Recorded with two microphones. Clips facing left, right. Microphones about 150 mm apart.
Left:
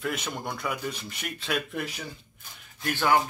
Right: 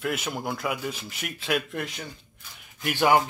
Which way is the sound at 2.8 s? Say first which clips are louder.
Right 3 dB; 15° right (ahead or behind).